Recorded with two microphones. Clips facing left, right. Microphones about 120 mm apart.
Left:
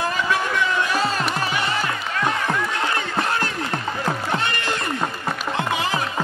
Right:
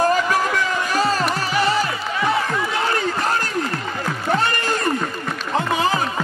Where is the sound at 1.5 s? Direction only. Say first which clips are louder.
Right 5 dB; 35° right (ahead or behind).